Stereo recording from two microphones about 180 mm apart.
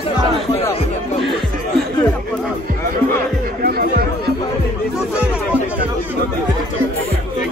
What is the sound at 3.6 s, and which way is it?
Music, 60° right (ahead or behind).